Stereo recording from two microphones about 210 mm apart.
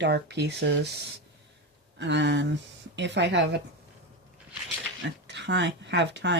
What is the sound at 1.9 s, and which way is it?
Speech, 55° right (ahead or behind).